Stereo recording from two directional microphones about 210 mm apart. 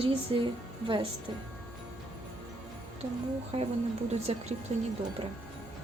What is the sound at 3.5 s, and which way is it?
A woman's voice, 30° right (ahead or behind).